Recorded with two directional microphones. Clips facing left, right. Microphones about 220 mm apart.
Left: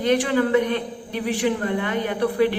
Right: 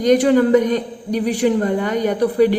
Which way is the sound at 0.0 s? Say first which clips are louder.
Right 7 dB; 40° right (ahead or behind).